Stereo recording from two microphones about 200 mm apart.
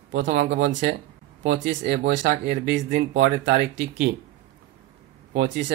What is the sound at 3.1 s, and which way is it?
Speech, 60° right (ahead or behind).